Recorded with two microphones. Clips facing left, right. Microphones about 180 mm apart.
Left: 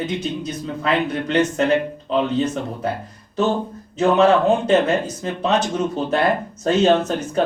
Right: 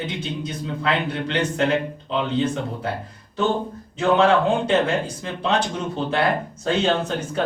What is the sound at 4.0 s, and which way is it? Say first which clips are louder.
Speech: left 2 dB; 40° left (ahead or behind).